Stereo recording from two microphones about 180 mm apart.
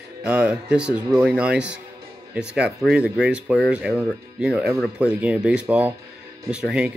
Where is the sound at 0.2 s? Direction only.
5° right (ahead or behind).